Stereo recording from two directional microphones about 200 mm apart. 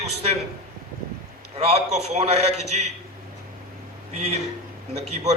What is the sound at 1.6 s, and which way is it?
A man's voice, 30° right (ahead or behind).